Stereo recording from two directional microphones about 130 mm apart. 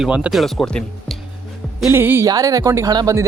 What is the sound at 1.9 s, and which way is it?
Speech, 15° right (ahead or behind).